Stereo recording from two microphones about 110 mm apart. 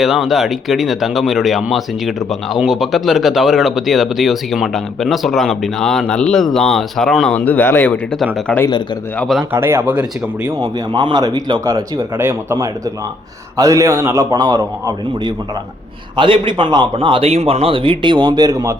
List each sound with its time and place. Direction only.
0.0 s speech: 5° right (ahead or behind)
7.3 s speech: 15° left (ahead or behind)
9.2 s speech: centre (ahead or behind)
9.5 s speech: 20° right (ahead or behind)
10.6 s a man's voice: 40° right (ahead or behind)
11.9 s a man's voice: 20° right (ahead or behind); by 15.3 s 35° right (ahead or behind)
16.1 s a man's voice: 50° right (ahead or behind); by 18.8 s 35° right (ahead or behind)